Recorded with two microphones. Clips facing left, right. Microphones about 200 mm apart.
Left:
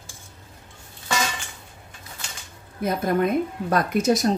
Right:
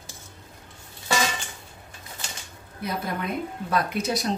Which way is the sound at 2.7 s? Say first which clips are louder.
Left 8 dB; 45° left (ahead or behind).